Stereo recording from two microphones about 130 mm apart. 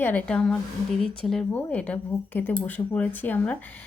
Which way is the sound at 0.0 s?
10° left (ahead or behind).